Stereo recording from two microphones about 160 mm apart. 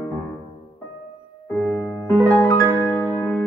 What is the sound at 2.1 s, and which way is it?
Music, 15° left (ahead or behind).